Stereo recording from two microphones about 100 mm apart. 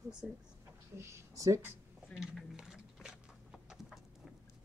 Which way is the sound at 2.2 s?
5° right (ahead or behind).